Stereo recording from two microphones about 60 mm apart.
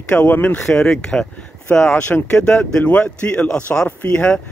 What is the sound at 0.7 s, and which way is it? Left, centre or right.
Speech, centre.